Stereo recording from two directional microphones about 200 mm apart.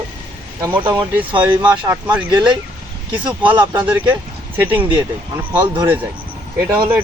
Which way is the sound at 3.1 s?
10° right (ahead or behind).